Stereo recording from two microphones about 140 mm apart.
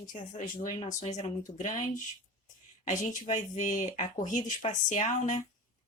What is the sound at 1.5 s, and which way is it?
Speech, 65° left (ahead or behind).